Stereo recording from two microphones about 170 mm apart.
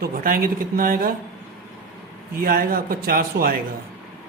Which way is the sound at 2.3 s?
55° right (ahead or behind).